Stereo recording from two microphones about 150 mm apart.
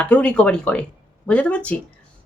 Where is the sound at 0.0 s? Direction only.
10° left (ahead or behind).